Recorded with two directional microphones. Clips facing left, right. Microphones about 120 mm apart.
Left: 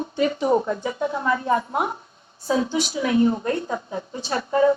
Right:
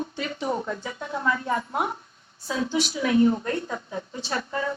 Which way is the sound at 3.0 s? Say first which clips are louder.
Left 1 dB; 25° left (ahead or behind).